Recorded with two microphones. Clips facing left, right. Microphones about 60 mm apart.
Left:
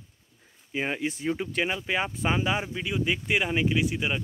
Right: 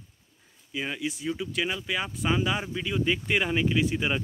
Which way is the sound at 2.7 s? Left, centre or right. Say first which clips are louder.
Right 1 dB; centre.